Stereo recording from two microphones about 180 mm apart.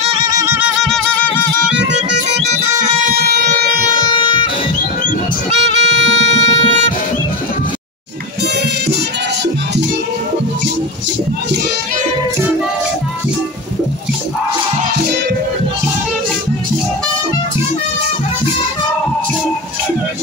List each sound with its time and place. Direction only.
0.0 s music: 30° right (ahead or behind)
0.6 s music: centre (ahead or behind)
5.6 s music: 80° right
6.3 s music: 40° right (ahead or behind)